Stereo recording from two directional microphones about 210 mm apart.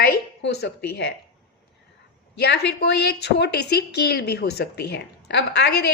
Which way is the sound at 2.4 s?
55° left (ahead or behind).